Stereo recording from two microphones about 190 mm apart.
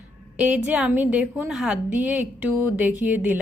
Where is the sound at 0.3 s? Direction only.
10° right (ahead or behind).